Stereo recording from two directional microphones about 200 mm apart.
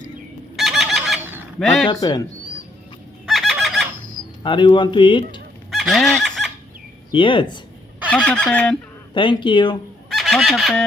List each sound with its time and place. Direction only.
0.5 s fowl: centre (ahead or behind)
1.9 s speech: 20° left (ahead or behind)
3.2 s fowl: centre (ahead or behind)
4.4 s speech: 25° left (ahead or behind)
5.7 s fowl: centre (ahead or behind)
7.1 s speech: 25° left (ahead or behind)
8.1 s fowl: 5° left (ahead or behind)
9.1 s speech: 25° left (ahead or behind)
10.1 s fowl: centre (ahead or behind)